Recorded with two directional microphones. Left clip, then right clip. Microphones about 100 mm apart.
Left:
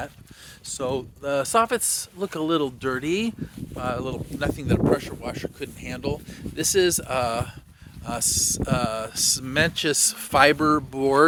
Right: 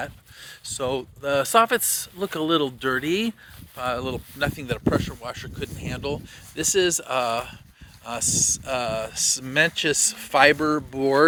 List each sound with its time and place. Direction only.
0.6 s speech: 10° left (ahead or behind)
4.5 s speech: 40° left (ahead or behind)
6.6 s speech: 50° left (ahead or behind)